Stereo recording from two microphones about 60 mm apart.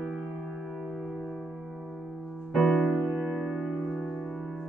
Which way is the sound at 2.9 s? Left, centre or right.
Centre.